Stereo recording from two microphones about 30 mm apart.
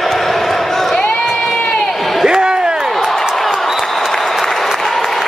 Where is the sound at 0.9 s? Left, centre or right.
Left.